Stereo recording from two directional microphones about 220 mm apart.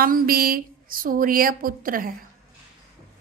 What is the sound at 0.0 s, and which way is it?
A woman's voice, 40° right (ahead or behind).